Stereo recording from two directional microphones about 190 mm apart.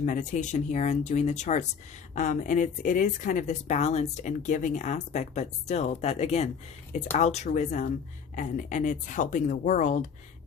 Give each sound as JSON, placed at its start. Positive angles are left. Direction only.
{"t": 0.0, "sound": "speech", "side_deg": 40}